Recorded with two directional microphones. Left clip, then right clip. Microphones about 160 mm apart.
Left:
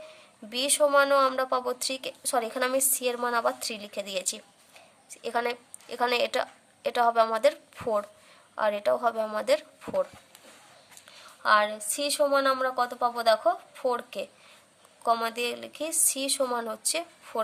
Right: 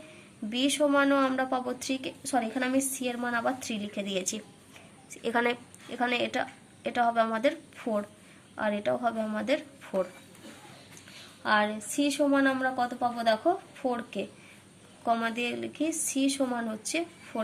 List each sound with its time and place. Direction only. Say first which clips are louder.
0.6 s a woman's voice: left 3 dB; 45° left (ahead or behind)
5.2 s a woman's voice: right 1 dB; 25° left (ahead or behind)
5.9 s a woman's voice: left 3 dB; 40° left (ahead or behind)
11.4 s a woman's voice: left 4 dB; 50° left (ahead or behind)